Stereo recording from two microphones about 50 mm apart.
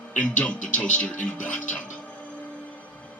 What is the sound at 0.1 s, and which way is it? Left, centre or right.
Speech, left.